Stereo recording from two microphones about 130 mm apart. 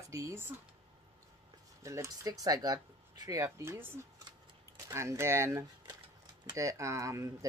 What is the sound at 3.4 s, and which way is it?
Speech, 20° right (ahead or behind).